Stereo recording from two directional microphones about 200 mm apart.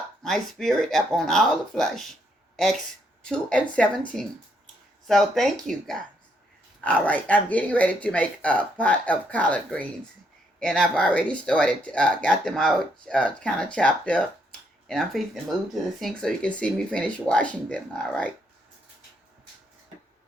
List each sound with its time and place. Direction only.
0.2 s speech: centre (ahead or behind)
3.2 s speech: 5° left (ahead or behind)
5.0 s speech: centre (ahead or behind)